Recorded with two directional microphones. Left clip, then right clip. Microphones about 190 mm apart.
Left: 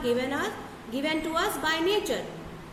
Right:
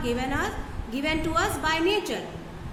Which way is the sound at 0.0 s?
30° right (ahead or behind).